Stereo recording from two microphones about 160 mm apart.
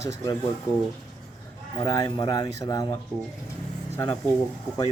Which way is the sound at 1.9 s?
25° left (ahead or behind).